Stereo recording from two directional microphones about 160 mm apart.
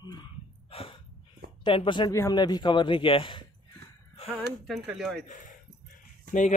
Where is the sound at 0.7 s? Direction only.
35° left (ahead or behind).